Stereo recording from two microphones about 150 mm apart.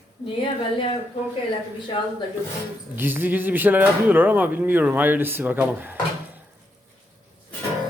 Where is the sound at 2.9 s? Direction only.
15° right (ahead or behind).